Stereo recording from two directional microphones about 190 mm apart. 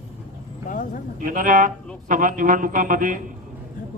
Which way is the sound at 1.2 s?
45° right (ahead or behind).